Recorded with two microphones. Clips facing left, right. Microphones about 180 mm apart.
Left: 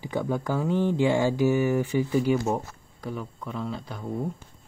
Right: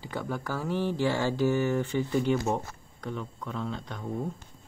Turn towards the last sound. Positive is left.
turn(degrees=5)  # may be behind; listen again after turning